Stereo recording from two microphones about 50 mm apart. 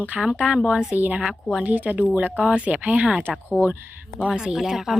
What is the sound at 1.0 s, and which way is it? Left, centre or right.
A woman's voice, right.